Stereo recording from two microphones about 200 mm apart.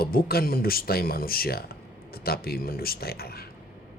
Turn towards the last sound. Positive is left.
turn(degrees=50)  # may be behind; listen again after turning